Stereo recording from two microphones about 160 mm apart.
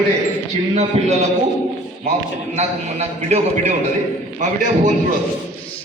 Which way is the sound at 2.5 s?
45° right (ahead or behind).